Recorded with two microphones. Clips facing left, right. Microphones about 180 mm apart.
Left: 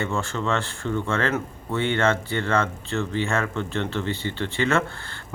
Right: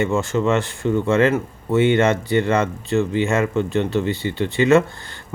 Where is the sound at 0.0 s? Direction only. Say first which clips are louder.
Right 7 dB; 15° right (ahead or behind).